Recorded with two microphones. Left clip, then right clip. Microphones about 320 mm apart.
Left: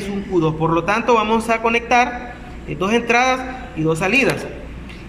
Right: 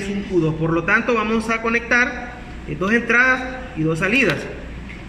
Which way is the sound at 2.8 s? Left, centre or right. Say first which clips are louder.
Even; centre.